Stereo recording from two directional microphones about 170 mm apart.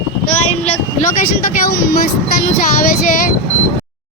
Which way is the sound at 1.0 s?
55° left (ahead or behind).